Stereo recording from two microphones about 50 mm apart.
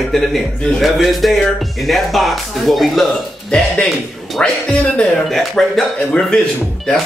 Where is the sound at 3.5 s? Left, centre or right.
Centre.